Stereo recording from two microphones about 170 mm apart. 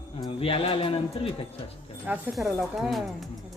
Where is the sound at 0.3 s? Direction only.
30° left (ahead or behind).